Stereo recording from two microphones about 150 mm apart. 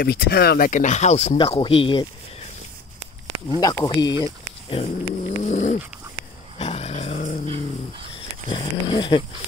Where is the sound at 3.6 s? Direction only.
25° left (ahead or behind).